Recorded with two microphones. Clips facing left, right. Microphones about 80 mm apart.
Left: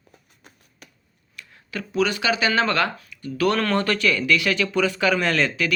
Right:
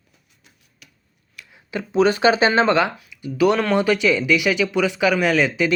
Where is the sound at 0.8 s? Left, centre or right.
Left.